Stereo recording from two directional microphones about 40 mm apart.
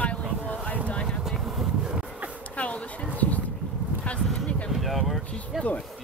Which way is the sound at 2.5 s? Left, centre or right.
Left.